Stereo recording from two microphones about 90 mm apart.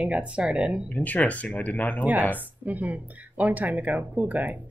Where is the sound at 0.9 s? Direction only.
15° left (ahead or behind).